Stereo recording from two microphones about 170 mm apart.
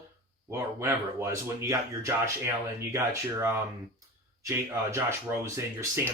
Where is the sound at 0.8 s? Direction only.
15° right (ahead or behind).